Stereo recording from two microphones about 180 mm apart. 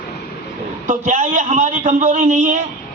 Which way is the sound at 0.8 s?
45° right (ahead or behind).